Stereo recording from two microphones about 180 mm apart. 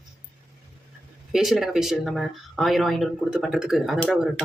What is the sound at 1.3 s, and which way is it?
Speech, centre (ahead or behind).